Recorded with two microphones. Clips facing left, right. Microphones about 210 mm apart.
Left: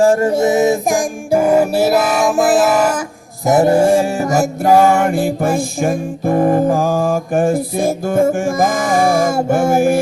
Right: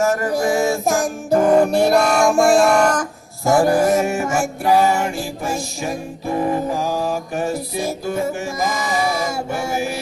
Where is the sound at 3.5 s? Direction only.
20° left (ahead or behind).